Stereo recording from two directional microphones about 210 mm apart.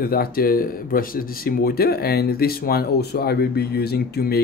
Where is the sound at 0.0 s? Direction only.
45° left (ahead or behind).